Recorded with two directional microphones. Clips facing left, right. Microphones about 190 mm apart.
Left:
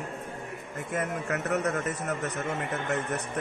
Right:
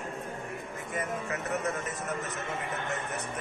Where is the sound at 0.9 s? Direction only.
70° left (ahead or behind).